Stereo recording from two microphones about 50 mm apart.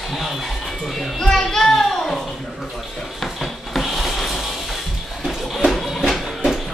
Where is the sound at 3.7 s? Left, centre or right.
Centre.